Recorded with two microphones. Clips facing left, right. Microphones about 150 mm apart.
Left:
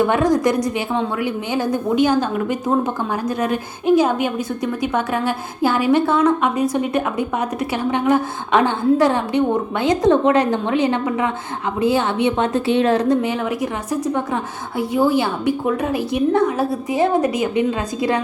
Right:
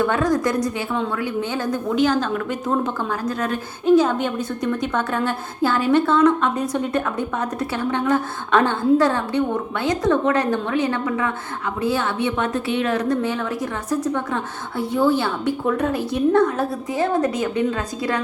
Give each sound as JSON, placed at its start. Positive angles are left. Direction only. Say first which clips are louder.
{"t": 0.0, "sound": "a woman's voice", "louder": "left 3 dB", "side_deg": 15}
{"t": 13.1, "sound": "a woman's voice", "louder": "left 3 dB", "side_deg": 15}